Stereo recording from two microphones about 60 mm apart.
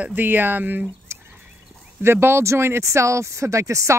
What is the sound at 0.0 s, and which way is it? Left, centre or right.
Speech, right.